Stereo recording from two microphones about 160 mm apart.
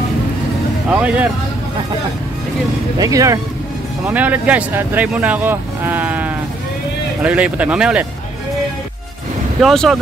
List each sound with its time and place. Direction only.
0.8 s speech: 10° right (ahead or behind)
3.0 s speech: 20° right (ahead or behind)
4.0 s speech: 10° right (ahead or behind)
9.6 s speech: centre (ahead or behind)